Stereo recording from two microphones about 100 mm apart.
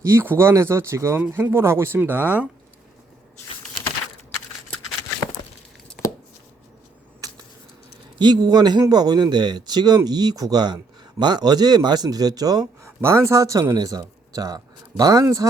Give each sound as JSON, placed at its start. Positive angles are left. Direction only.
{"t": 0.0, "sound": "speech", "side_deg": -25}
{"t": 8.2, "sound": "speech", "side_deg": -45}
{"t": 13.0, "sound": "speech", "side_deg": -25}